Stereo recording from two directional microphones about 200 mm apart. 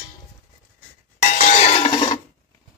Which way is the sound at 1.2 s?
40° left (ahead or behind).